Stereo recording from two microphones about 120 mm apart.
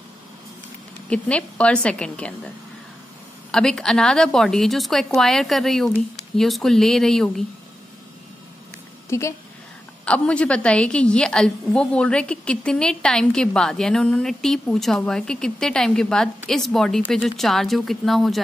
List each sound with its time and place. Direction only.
1.0 s a woman's voice: 10° left (ahead or behind)
3.5 s a woman's voice: 5° left (ahead or behind)
9.1 s a woman's voice: 25° left (ahead or behind)
10.0 s a woman's voice: 10° left (ahead or behind)